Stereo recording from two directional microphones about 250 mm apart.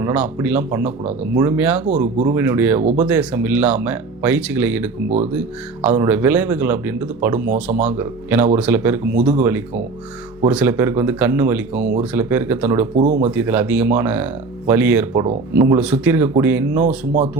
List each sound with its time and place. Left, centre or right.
0.0 s speech: centre
13.0 s speech: right
13.3 s speech: centre